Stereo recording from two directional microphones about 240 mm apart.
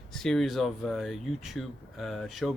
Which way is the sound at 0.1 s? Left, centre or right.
Centre.